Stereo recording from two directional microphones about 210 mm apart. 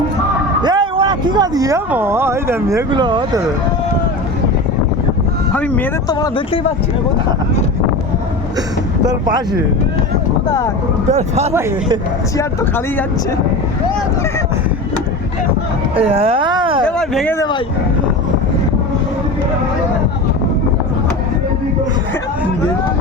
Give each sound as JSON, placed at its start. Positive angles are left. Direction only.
{"t": 0.6, "sound": "speech", "side_deg": -20}
{"t": 5.5, "sound": "speech", "side_deg": 10}
{"t": 6.1, "sound": "speech", "side_deg": 20}
{"t": 9.0, "sound": "speech", "side_deg": -20}
{"t": 11.1, "sound": "speech", "side_deg": -30}
{"t": 12.4, "sound": "speech", "side_deg": 10}
{"t": 16.0, "sound": "speech", "side_deg": -25}
{"t": 16.8, "sound": "speech", "side_deg": 5}
{"t": 17.3, "sound": "speech", "side_deg": 20}